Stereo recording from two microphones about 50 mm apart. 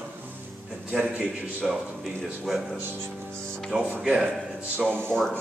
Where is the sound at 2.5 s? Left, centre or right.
Centre.